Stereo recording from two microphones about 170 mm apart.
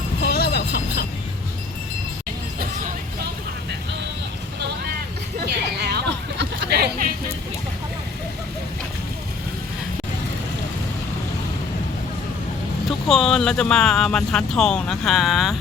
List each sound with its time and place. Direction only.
0.2 s vehicle: 70° left (ahead or behind)
5.8 s a sound: 85° right
13.1 s speech: centre (ahead or behind)